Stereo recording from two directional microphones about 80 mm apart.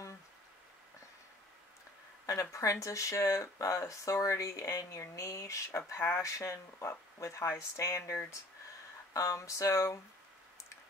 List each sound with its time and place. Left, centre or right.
2.2 s speech: left